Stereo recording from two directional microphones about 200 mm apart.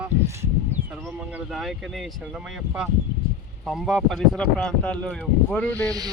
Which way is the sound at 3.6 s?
Centre (ahead or behind).